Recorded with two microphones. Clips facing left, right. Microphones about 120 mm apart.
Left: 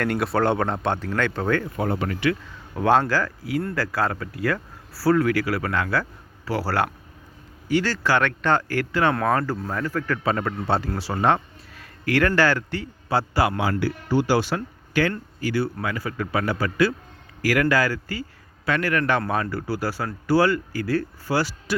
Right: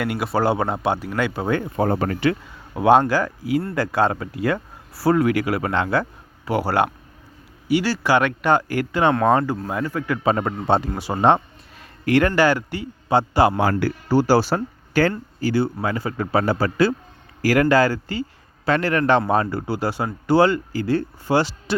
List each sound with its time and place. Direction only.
0.0 s speech: 5° right (ahead or behind)
1.7 s a man's voice: 40° right (ahead or behind)
2.7 s speech: 15° right (ahead or behind)
13.6 s a man's voice: 50° right (ahead or behind); by 21.8 s 25° right (ahead or behind)